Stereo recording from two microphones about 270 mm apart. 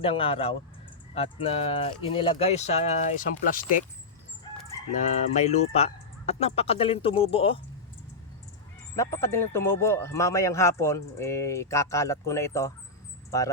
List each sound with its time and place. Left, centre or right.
0.0 s speech: left
5.0 s speech: left
9.0 s speech: centre